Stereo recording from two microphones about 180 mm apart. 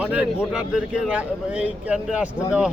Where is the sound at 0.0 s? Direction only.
5° right (ahead or behind).